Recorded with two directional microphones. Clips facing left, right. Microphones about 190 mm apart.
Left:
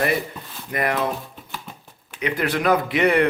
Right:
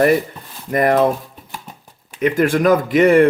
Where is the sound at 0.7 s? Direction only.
45° right (ahead or behind).